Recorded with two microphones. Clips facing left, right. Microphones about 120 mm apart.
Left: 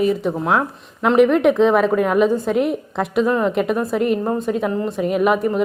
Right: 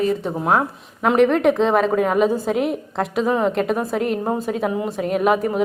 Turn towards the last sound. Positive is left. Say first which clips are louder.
# left 1 dB
turn(degrees=0)  # may be behind; listen again after turning